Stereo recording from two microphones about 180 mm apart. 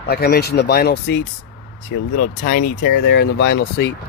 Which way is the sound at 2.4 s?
60° left (ahead or behind).